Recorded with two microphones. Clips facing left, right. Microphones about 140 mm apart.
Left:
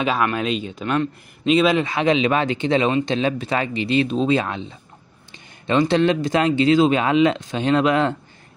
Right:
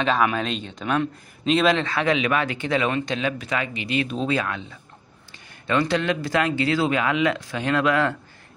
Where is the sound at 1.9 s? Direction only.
20° left (ahead or behind).